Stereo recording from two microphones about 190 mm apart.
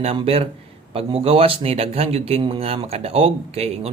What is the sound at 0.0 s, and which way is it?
Speech, 30° right (ahead or behind).